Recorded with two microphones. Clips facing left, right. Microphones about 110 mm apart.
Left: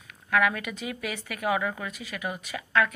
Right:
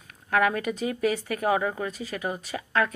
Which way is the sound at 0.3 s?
35° right (ahead or behind).